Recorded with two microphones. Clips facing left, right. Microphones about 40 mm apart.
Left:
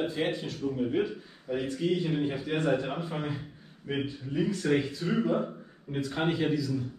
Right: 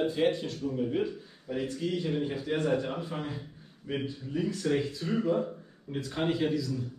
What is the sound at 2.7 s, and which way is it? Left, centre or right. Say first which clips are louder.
Speech: left 2 dB; left.